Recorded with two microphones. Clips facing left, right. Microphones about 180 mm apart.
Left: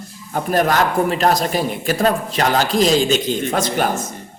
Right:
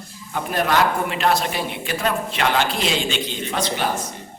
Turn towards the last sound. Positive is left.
turn(degrees=45)  # may be behind; listen again after turning